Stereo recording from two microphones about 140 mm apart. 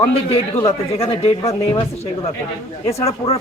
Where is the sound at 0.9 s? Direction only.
45° left (ahead or behind).